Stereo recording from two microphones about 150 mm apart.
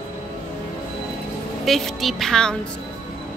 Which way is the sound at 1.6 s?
Centre (ahead or behind).